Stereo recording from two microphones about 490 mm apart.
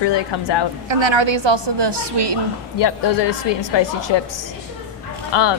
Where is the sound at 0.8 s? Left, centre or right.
Right.